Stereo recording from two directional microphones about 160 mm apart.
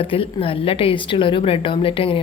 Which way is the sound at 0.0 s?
35° left (ahead or behind).